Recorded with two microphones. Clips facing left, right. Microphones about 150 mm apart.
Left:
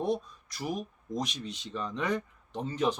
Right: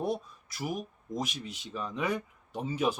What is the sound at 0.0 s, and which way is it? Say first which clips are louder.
Speech: left 2 dB; 5° right (ahead or behind).